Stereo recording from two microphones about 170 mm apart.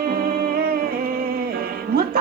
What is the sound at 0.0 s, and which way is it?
Music, 60° right (ahead or behind).